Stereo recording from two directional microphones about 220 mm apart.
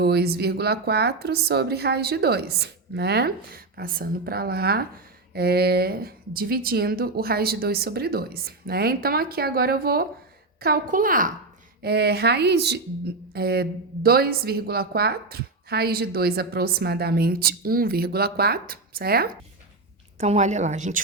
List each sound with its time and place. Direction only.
0.0 s a woman's voice: 45° right (ahead or behind)
20.1 s a woman's voice: 30° right (ahead or behind)